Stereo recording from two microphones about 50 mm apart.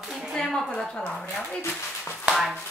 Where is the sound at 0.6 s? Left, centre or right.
Centre.